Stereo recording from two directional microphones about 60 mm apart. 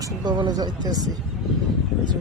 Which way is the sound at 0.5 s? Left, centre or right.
Right.